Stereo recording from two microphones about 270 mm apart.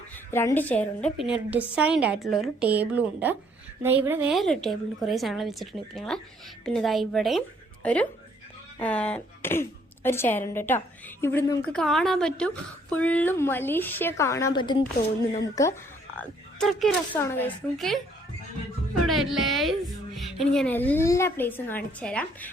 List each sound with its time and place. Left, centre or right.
0.3 s a woman's voice: centre
16.1 s a woman's voice: centre
19.0 s a woman's voice: centre